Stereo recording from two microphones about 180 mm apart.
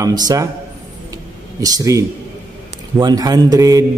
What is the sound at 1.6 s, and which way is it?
Speech, 20° right (ahead or behind).